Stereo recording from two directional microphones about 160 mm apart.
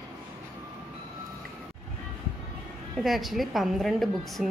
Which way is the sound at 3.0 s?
Centre (ahead or behind).